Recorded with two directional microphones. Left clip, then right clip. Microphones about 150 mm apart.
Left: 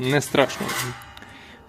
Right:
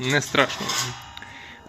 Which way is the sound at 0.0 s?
20° left (ahead or behind).